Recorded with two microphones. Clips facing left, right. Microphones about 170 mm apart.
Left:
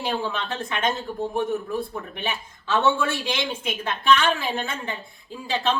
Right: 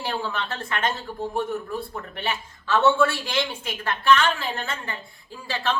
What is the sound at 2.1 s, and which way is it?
A woman's voice, 15° left (ahead or behind).